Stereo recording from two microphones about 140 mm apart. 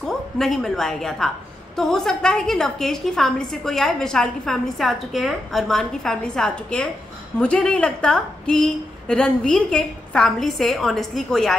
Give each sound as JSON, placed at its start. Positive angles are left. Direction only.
{"t": 0.0, "sound": "a woman's voice", "side_deg": 5}